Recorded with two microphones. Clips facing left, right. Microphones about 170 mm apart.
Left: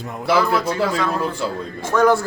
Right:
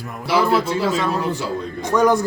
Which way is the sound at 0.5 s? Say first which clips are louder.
Right 1 dB; 25° right (ahead or behind).